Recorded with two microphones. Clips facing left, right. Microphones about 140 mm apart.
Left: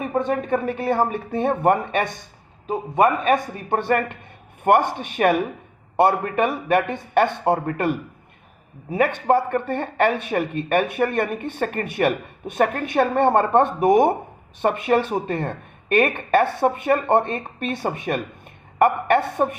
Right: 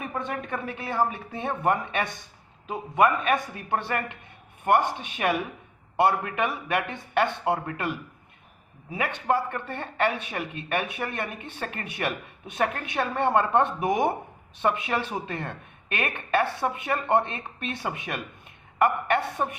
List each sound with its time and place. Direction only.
0.3 s a man's voice: 40° left (ahead or behind)